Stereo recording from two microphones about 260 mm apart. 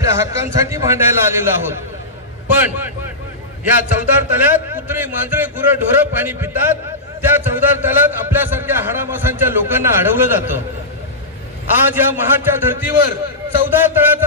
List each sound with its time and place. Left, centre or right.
0.0 s speech: centre
11.9 s speech: centre